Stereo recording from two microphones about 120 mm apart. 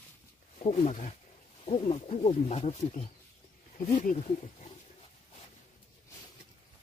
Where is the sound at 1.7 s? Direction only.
60° left (ahead or behind).